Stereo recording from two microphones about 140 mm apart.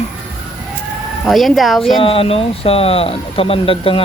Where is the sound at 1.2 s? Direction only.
Centre (ahead or behind).